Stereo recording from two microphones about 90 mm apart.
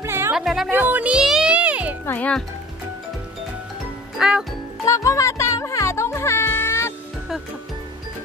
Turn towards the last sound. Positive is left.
turn(degrees=30)  # may be behind; listen again after turning